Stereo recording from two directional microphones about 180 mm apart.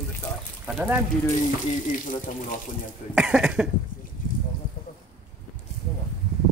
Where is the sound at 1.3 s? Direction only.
45° left (ahead or behind).